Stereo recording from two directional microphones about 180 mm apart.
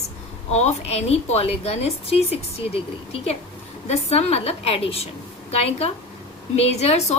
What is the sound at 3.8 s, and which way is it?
A woman's voice, 35° left (ahead or behind).